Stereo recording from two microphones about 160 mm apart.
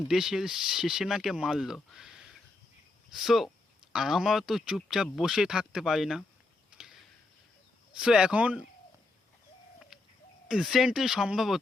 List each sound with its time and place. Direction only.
0.1 s speech: 5° right (ahead or behind)
6.7 s a sound: 5° right (ahead or behind)
7.9 s speech: 5° right (ahead or behind)
9.9 s chicken: centre (ahead or behind)
10.5 s speech: centre (ahead or behind)